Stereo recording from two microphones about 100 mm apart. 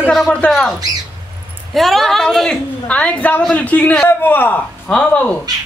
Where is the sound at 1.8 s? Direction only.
Centre (ahead or behind).